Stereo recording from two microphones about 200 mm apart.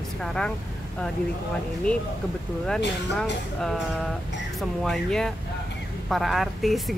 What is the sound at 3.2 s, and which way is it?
A woman's voice, centre (ahead or behind).